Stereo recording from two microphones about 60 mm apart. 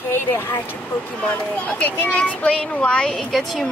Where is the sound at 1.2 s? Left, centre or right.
Left; by 3.7 s centre.